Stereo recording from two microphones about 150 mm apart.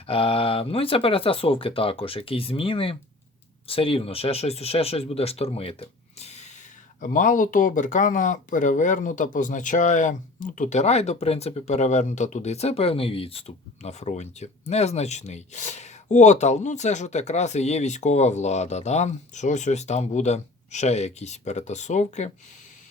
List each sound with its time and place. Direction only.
0.1 s speech: 40° left (ahead or behind)
7.0 s speech: 60° left (ahead or behind)